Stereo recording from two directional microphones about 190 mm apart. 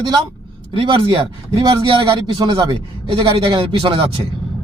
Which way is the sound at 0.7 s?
30° right (ahead or behind).